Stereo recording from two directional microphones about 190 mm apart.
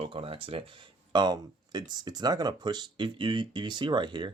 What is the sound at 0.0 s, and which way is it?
Speech, 30° right (ahead or behind).